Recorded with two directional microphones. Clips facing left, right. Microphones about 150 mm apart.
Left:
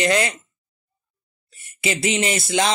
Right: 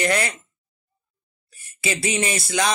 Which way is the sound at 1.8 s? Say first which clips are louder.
Left 2 dB; 20° left (ahead or behind).